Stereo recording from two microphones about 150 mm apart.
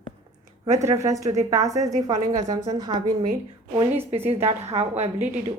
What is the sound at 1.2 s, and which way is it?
Speech, 50° right (ahead or behind).